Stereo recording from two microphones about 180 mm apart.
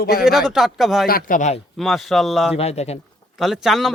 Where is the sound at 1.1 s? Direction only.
50° left (ahead or behind).